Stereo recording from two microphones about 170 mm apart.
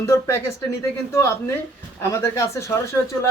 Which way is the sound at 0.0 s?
15° left (ahead or behind).